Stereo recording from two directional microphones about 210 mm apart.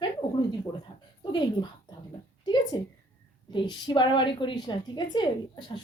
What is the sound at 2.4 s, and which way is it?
A woman's voice, 20° left (ahead or behind).